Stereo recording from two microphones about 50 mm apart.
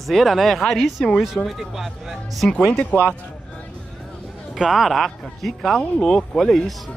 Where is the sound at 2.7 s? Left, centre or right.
Left.